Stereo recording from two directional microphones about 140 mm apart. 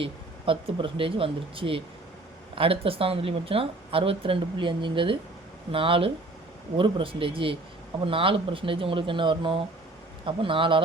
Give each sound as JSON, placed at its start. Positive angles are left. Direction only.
{"t": 0.0, "sound": "speech", "side_deg": -40}